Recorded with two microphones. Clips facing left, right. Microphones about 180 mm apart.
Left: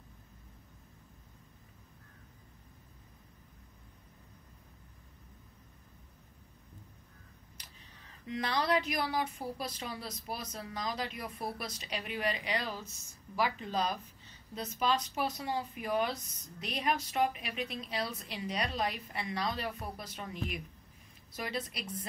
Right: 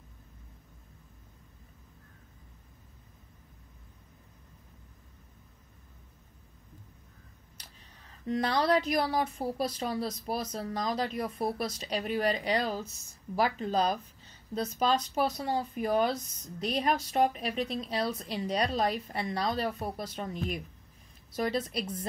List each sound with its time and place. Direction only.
8.3 s speech: 40° right (ahead or behind)
21.4 s speech: 40° right (ahead or behind)